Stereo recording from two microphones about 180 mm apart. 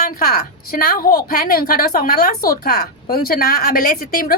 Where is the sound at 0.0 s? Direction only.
55° left (ahead or behind).